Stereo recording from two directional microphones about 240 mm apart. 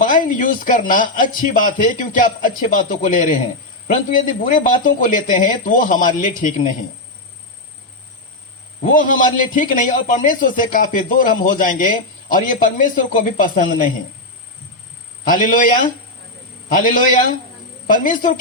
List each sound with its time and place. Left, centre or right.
0.0 s a man's voice: left
8.8 s a man's voice: left
15.2 s a man's voice: left